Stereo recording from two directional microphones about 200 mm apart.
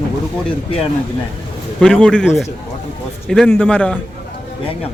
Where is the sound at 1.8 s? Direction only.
5° left (ahead or behind).